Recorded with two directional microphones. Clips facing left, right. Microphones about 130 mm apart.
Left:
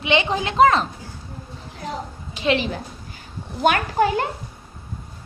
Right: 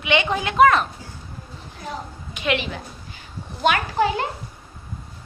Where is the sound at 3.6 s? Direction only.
45° left (ahead or behind).